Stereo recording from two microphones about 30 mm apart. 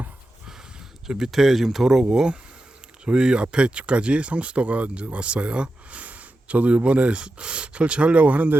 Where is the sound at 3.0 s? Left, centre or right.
Right.